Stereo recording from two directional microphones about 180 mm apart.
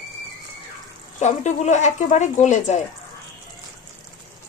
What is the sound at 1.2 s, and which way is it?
Speech, 40° left (ahead or behind).